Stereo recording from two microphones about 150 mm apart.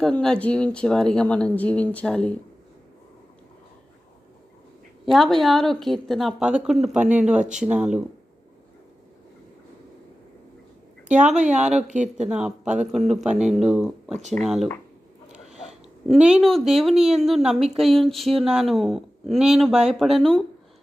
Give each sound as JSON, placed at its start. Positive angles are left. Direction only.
{"t": 0.0, "sound": "speech", "side_deg": 5}
{"t": 5.0, "sound": "a woman's voice", "side_deg": 0}
{"t": 11.1, "sound": "a woman's voice", "side_deg": -10}
{"t": 14.1, "sound": "speech", "side_deg": -50}
{"t": 14.3, "sound": "a woman's voice", "side_deg": 0}
{"t": 16.0, "sound": "a woman's voice", "side_deg": -5}